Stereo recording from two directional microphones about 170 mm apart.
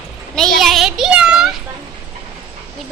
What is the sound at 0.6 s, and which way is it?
Child singing, centre (ahead or behind).